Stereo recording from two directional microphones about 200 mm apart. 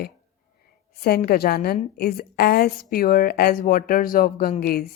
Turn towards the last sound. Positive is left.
turn(degrees=50)  # may be behind; listen again after turning